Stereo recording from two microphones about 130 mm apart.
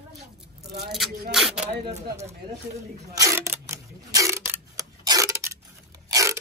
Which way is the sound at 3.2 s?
20° right (ahead or behind).